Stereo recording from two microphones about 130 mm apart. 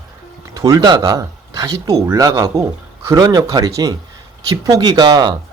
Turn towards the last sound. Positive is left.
turn(degrees=-35)  # may be behind; listen again after turning